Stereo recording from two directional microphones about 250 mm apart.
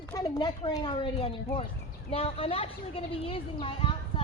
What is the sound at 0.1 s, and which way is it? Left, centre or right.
Speech, centre.